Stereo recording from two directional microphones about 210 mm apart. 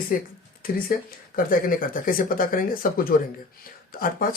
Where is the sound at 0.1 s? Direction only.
40° left (ahead or behind).